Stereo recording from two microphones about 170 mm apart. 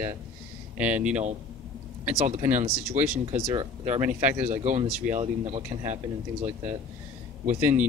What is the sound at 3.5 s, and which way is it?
Speech, 35° right (ahead or behind).